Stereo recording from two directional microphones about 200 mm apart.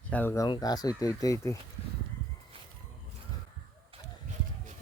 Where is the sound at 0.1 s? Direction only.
10° left (ahead or behind).